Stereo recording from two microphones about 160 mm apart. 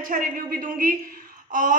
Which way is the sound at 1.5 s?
55° right (ahead or behind).